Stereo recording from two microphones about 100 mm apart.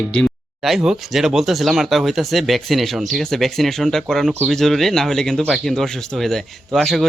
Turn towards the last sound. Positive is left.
turn(degrees=5)  # may be behind; listen again after turning